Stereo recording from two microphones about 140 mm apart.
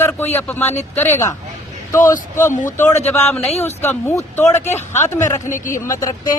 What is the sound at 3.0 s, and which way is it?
Speech, 15° left (ahead or behind).